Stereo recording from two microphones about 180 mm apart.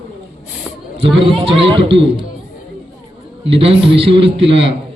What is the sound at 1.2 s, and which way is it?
Speech, 30° right (ahead or behind).